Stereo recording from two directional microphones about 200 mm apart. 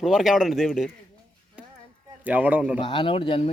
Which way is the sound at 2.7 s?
25° left (ahead or behind).